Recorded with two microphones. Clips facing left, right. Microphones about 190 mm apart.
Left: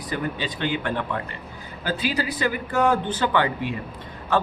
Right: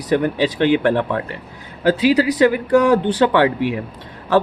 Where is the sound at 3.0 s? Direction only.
70° right (ahead or behind).